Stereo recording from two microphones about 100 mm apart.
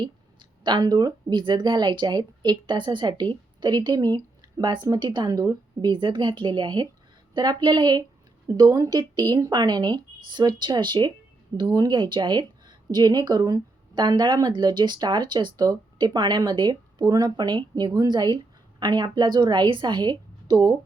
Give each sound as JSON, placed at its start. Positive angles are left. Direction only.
{"t": 0.0, "sound": "a woman's voice", "side_deg": -50}